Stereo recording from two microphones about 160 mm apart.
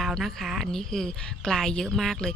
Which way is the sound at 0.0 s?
Centre (ahead or behind).